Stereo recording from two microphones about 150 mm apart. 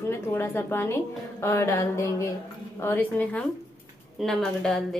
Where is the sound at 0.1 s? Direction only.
15° left (ahead or behind).